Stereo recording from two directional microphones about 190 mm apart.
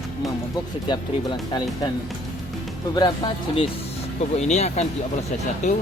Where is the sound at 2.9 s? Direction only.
20° left (ahead or behind).